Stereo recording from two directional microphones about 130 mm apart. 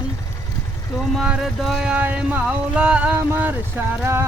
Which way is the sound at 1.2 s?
5° right (ahead or behind).